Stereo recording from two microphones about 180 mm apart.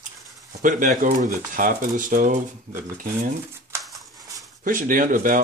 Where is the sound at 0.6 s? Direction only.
45° right (ahead or behind).